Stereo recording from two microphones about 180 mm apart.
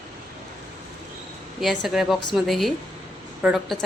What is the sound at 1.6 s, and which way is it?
A woman's voice, centre (ahead or behind).